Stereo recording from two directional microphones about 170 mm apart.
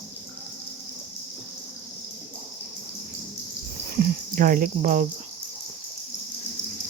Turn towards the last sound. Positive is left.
turn(degrees=-50)  # may be behind; listen again after turning